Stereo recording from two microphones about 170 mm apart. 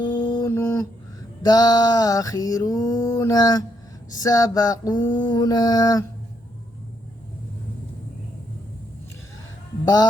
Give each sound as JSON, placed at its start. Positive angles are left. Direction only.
{"t": 0.0, "sound": "mantra", "side_deg": 25}
{"t": 1.4, "sound": "a sound", "side_deg": 25}
{"t": 9.8, "sound": "hum", "side_deg": 25}